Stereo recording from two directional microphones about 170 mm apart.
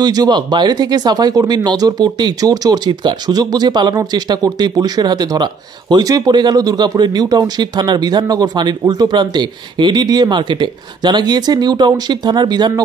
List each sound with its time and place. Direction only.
0.0 s speech: 25° right (ahead or behind)